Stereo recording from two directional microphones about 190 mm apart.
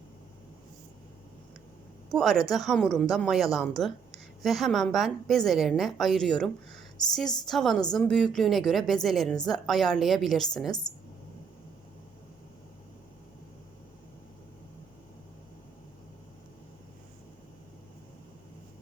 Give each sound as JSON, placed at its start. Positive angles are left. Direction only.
{"t": 2.1, "sound": "a woman's voice", "side_deg": 0}
{"t": 7.0, "sound": "speech", "side_deg": 20}
{"t": 7.4, "sound": "a woman's voice", "side_deg": 0}
{"t": 10.7, "sound": "speech", "side_deg": 20}